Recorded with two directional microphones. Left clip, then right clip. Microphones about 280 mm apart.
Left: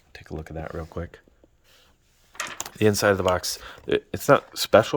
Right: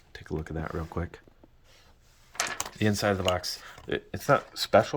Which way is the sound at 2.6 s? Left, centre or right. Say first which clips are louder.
Left 9 dB; centre.